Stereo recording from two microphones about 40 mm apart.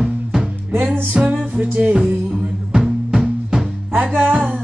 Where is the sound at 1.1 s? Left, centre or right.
Right.